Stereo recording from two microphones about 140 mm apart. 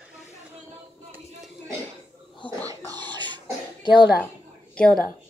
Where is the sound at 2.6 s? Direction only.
35° right (ahead or behind).